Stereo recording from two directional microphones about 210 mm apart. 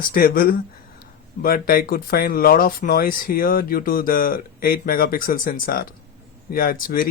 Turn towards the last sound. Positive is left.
turn(degrees=40)  # may be behind; listen again after turning